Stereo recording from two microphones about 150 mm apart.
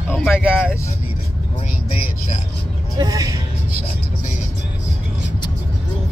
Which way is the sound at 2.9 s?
25° right (ahead or behind).